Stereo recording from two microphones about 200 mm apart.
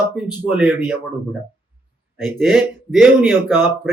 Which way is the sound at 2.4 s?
Centre (ahead or behind).